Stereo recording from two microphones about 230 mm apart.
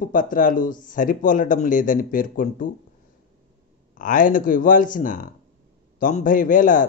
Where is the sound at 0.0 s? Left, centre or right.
Left.